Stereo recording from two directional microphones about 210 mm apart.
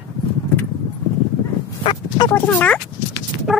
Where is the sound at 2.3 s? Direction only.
5° left (ahead or behind).